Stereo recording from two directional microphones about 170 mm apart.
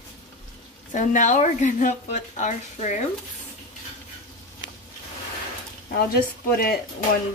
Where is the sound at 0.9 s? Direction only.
50° left (ahead or behind).